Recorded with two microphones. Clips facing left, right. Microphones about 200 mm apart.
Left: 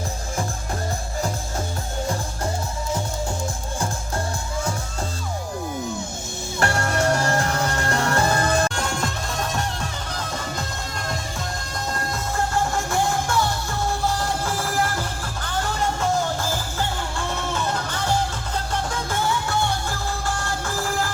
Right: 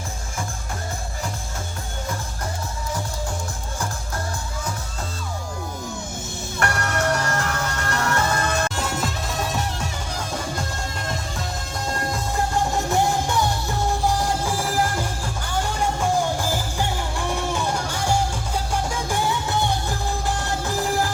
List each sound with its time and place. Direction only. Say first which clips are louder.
6.6 s music: left 2 dB; 30° left (ahead or behind)
8.7 s music: even; 5° right (ahead or behind)
12.9 s music: right 2 dB; 15° right (ahead or behind)